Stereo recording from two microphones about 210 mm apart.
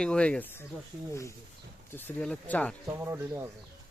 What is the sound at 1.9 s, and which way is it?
Speech, 10° left (ahead or behind).